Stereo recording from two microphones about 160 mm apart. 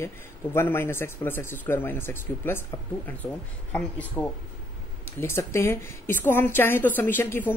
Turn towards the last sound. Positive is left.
turn(degrees=15)  # may be behind; listen again after turning